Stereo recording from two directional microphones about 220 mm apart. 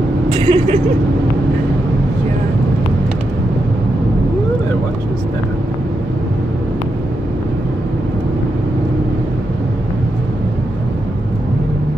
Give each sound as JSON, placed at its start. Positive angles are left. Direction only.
{"t": 0.3, "sound": "speech", "side_deg": -25}